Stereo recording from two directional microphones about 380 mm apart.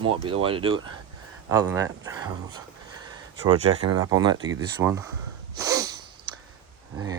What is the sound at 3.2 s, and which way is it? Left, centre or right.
Speech, centre.